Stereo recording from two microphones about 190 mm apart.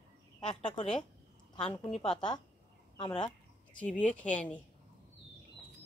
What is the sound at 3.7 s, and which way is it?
Speech, 5° left (ahead or behind).